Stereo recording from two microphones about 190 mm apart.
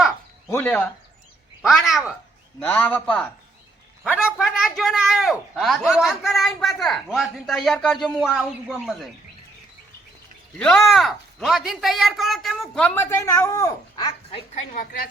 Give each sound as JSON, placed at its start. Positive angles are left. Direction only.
{"t": 0.5, "sound": "speech", "side_deg": 10}
{"t": 1.6, "sound": "a man's voice", "side_deg": 0}
{"t": 4.1, "sound": "a man's voice", "side_deg": -5}
{"t": 10.6, "sound": "a man's voice", "side_deg": 5}
{"t": 14.3, "sound": "a woman's voice", "side_deg": 30}
{"t": 14.7, "sound": "a woman's voice", "side_deg": 45}